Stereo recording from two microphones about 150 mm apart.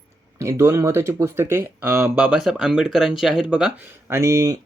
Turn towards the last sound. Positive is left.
turn(degrees=-20)  # may be behind; listen again after turning